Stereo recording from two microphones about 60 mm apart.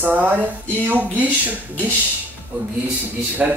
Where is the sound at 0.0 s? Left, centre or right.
Right.